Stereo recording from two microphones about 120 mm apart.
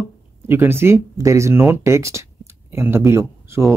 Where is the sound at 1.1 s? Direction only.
25° right (ahead or behind).